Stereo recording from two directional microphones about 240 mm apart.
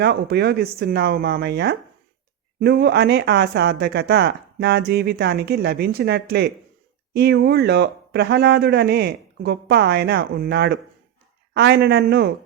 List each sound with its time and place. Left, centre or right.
0.0 s speech: right